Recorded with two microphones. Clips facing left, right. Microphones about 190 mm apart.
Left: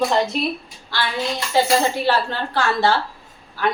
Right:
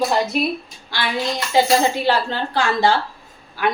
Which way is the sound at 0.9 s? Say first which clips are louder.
Right 1 dB; 15° right (ahead or behind).